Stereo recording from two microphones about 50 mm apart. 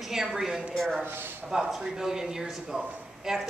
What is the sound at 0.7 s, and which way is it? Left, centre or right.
Speech, centre.